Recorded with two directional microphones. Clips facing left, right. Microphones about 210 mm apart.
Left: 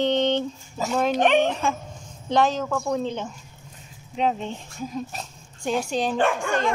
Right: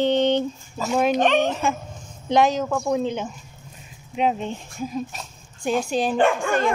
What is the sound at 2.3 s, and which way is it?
Speech, 15° right (ahead or behind).